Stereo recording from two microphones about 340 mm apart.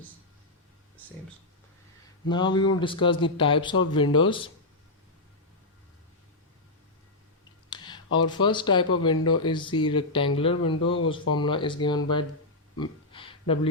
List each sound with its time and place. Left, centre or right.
2.2 s speech: centre
7.7 s speech: centre
12.7 s a sound: centre